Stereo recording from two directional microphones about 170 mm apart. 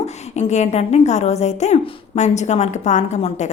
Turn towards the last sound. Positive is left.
turn(degrees=45)  # may be behind; listen again after turning